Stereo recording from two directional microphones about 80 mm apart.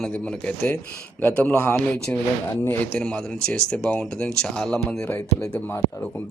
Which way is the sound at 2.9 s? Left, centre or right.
Centre.